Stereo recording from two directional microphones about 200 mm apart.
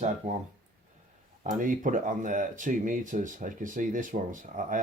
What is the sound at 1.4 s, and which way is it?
Speech, 40° right (ahead or behind).